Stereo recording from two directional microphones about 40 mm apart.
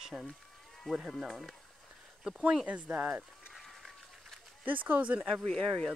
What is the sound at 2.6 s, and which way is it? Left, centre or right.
Speech, right.